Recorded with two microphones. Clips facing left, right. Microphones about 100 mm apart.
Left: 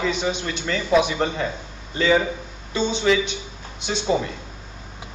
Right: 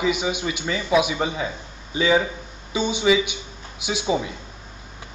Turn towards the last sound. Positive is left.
turn(degrees=-10)  # may be behind; listen again after turning